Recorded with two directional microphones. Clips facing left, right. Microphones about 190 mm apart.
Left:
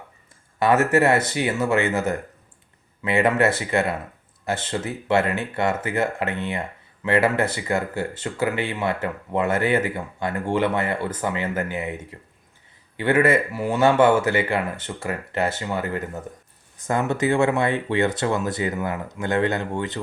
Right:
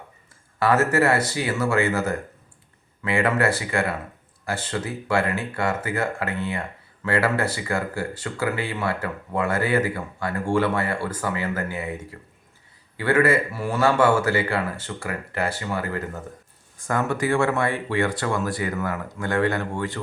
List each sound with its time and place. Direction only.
0.6 s speech: 20° left (ahead or behind)
13.0 s speech: 20° left (ahead or behind)